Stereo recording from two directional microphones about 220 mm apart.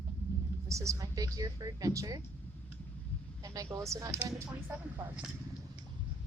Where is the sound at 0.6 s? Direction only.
15° right (ahead or behind).